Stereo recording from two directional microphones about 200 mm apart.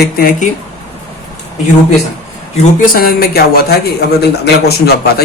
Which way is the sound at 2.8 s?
45° left (ahead or behind).